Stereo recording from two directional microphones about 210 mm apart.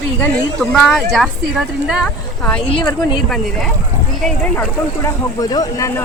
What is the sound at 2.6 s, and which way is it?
Speech, 25° left (ahead or behind).